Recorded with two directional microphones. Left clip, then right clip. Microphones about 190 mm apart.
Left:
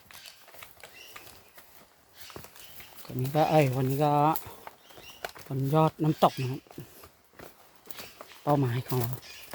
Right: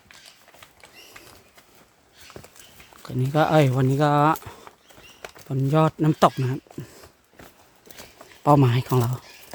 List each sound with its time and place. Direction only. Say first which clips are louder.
1.2 s bird: right 2 dB; 10° left (ahead or behind)
3.0 s speech: right 5 dB; 30° right (ahead or behind)
4.7 s a sound: even; 20° left (ahead or behind)
5.7 s speech: right 4 dB; 35° right (ahead or behind)
8.4 s speech: right 9 dB; 35° right (ahead or behind)